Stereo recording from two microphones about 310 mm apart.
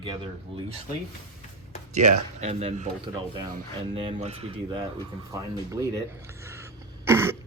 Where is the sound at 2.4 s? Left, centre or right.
Right.